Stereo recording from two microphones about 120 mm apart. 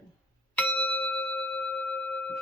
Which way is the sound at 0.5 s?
15° left (ahead or behind).